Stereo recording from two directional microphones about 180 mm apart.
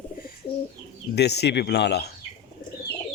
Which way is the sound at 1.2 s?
65° left (ahead or behind).